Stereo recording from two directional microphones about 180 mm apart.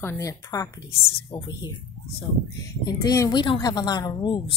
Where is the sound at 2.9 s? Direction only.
20° left (ahead or behind).